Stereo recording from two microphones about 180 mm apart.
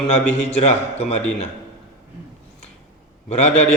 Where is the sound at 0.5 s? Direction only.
35° left (ahead or behind).